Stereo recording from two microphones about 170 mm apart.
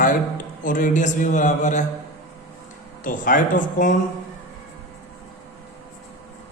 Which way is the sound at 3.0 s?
50° left (ahead or behind).